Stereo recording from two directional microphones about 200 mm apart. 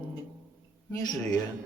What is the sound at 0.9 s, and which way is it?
Speech, 20° left (ahead or behind).